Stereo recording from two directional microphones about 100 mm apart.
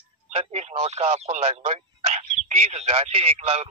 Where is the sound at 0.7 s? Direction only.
80° right.